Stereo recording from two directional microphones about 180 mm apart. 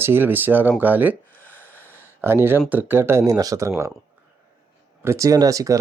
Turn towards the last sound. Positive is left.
turn(degrees=-20)  # may be behind; listen again after turning